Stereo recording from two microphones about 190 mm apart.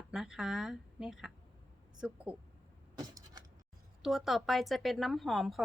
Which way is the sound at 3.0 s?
20° right (ahead or behind).